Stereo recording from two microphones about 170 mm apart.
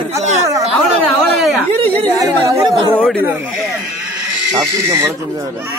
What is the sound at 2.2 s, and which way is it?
Chatter, 20° right (ahead or behind).